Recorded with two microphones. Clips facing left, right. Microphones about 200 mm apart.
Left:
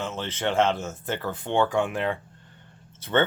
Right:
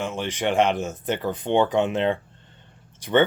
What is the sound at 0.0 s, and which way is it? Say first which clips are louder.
Speech: right 3 dB; 15° right (ahead or behind).